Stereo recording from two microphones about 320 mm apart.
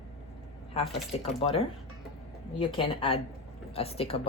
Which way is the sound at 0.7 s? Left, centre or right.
Centre.